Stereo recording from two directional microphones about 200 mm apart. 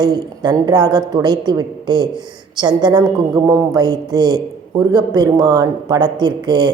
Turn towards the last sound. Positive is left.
turn(degrees=-20)  # may be behind; listen again after turning